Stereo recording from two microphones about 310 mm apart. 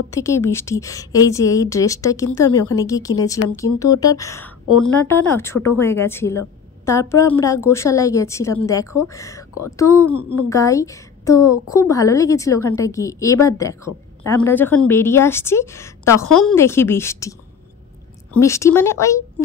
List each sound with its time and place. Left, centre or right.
0.1 s a woman's voice: centre